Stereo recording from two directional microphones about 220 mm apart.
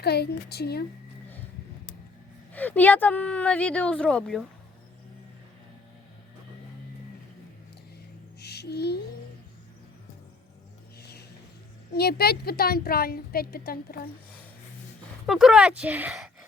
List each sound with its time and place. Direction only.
0.0 s a woman's voice: 45° left (ahead or behind)
2.5 s speech: 5° left (ahead or behind)
8.4 s a sound: 50° left (ahead or behind)
11.0 s a sound: 50° left (ahead or behind)
11.9 s a woman's voice: 45° left (ahead or behind)
15.3 s speech: centre (ahead or behind)